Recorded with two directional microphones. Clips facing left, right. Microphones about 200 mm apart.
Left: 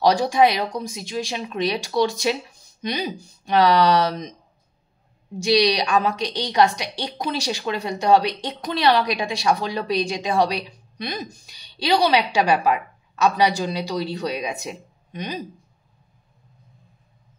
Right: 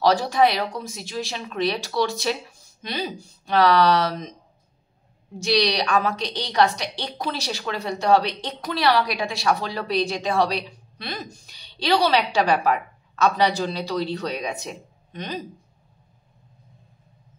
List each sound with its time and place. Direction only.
0.0 s a woman's voice: 15° left (ahead or behind)
5.4 s a woman's voice: 15° left (ahead or behind)